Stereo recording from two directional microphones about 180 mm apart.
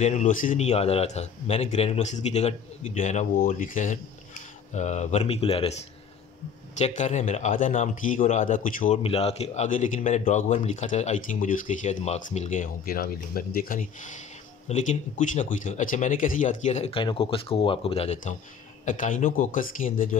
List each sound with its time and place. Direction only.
0.0 s a man's voice: 40° left (ahead or behind)
9.0 s a man's voice: 35° left (ahead or behind)